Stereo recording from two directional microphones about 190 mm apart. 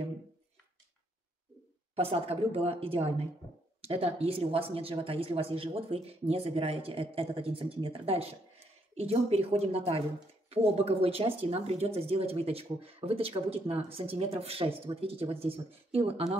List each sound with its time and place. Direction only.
2.0 s speech: 30° right (ahead or behind)